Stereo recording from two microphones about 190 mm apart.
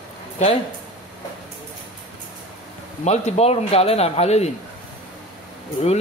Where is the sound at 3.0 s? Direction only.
35° left (ahead or behind).